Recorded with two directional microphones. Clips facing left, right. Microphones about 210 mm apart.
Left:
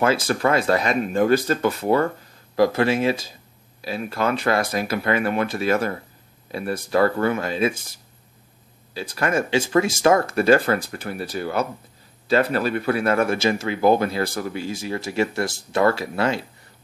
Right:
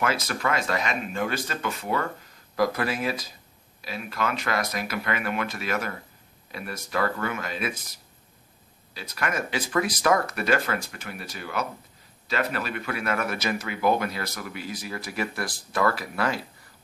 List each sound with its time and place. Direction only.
0.0 s speech: 30° left (ahead or behind)